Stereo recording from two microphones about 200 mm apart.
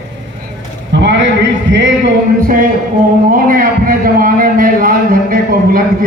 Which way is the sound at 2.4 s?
45° right (ahead or behind).